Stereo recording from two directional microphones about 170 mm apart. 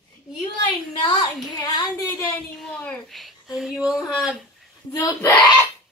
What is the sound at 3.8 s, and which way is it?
Speech, 5° right (ahead or behind).